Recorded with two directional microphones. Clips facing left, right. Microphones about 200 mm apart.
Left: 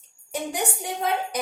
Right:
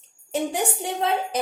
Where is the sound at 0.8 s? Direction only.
30° right (ahead or behind).